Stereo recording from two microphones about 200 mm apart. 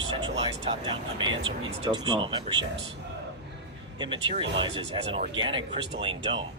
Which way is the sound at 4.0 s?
25° right (ahead or behind).